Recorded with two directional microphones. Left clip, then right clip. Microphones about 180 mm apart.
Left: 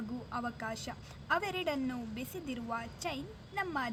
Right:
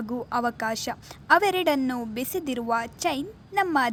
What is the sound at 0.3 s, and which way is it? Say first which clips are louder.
A woman's voice: right 13 dB; 45° right (ahead or behind).